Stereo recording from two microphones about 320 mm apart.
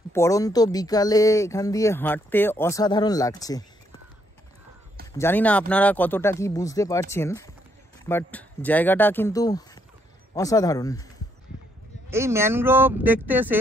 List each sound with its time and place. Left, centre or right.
0.1 s speech: centre
5.1 s speech: centre
12.1 s speech: centre